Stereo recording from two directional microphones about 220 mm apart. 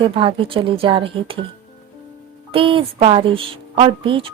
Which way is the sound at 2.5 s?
25° right (ahead or behind).